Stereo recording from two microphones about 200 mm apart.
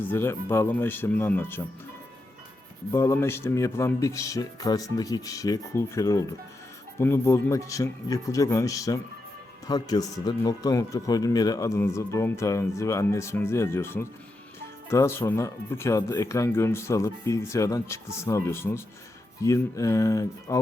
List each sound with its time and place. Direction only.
0.1 s speech: 10° left (ahead or behind)
2.9 s speech: 15° left (ahead or behind)